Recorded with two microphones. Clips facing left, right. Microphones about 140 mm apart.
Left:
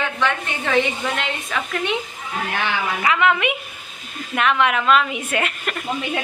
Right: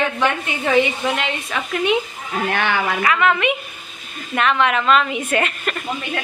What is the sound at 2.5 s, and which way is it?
Speech, 60° right (ahead or behind).